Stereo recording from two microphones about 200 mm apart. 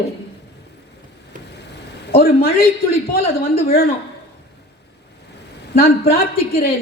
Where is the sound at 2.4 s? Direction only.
50° left (ahead or behind).